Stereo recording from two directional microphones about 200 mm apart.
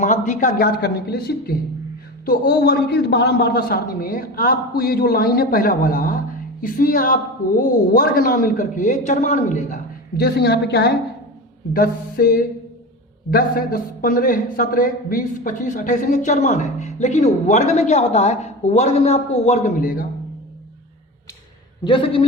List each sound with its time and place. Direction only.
0.0 s a man's voice: 40° left (ahead or behind); by 10.9 s 55° left (ahead or behind)
11.7 s a man's voice: 45° left (ahead or behind)
21.8 s a man's voice: 25° left (ahead or behind)